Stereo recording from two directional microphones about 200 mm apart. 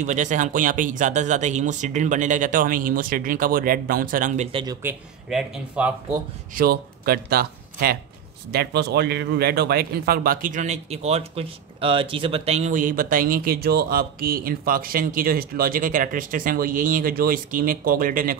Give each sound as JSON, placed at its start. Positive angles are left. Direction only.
{"t": 0.0, "sound": "speech", "side_deg": -35}
{"t": 4.5, "sound": "speech", "side_deg": -25}
{"t": 4.8, "sound": "speech", "side_deg": -5}
{"t": 6.5, "sound": "speech", "side_deg": -50}